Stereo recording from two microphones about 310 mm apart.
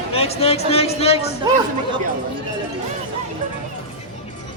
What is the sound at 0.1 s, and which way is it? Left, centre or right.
Speech, centre.